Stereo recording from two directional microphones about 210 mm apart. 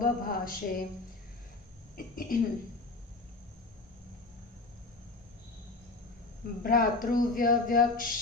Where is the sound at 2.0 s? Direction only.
40° left (ahead or behind).